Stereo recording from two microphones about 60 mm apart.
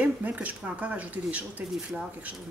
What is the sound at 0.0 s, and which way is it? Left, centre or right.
Speech, right.